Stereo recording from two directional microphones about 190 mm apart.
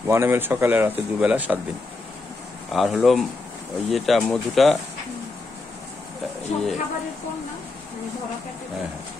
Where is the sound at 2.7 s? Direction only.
Centre (ahead or behind).